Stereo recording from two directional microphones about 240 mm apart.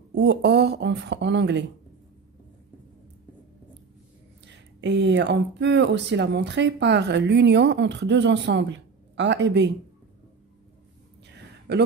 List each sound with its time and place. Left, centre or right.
0.1 s speech: right
4.5 s speech: right
11.2 s a sound: right